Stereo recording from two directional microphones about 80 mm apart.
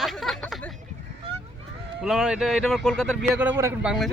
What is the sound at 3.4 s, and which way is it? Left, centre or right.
Speech, right.